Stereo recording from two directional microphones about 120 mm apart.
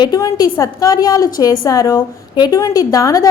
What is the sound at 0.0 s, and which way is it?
A woman's voice, 35° left (ahead or behind).